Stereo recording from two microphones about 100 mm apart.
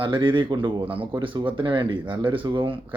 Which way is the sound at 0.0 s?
55° right (ahead or behind).